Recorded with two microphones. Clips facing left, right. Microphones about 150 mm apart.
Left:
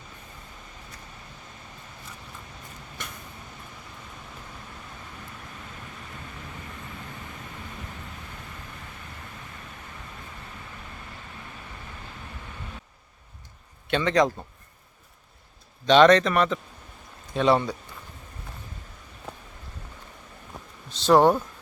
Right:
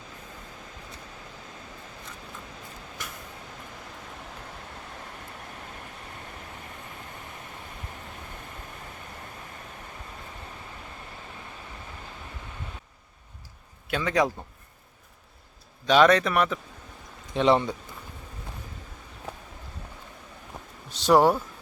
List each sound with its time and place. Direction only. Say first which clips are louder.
13.8 s speech: left 3 dB; 5° right (ahead or behind)
15.9 s a man's voice: left 3 dB; 5° right (ahead or behind)
17.3 s speech: even; 20° right (ahead or behind)
20.9 s speech: left 1 dB; 10° right (ahead or behind)